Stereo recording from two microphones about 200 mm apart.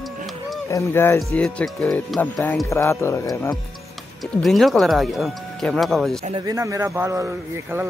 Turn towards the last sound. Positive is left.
turn(degrees=-15)  # may be behind; listen again after turning